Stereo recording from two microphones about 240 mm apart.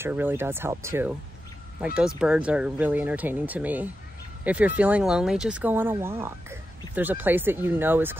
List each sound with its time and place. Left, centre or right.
0.0 s speech: centre